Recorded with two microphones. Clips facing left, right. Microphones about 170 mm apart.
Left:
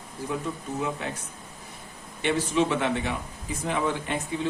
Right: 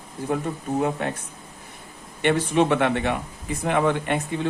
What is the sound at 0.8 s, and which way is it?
Speech, 55° right (ahead or behind).